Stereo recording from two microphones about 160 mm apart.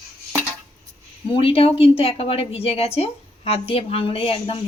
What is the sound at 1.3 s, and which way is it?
A woman's voice, 35° left (ahead or behind).